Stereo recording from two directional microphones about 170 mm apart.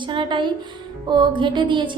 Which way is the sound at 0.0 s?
30° right (ahead or behind).